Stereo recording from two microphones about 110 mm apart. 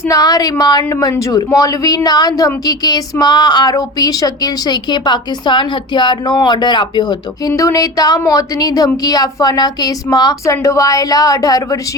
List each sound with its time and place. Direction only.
0.0 s a woman's voice: 35° left (ahead or behind)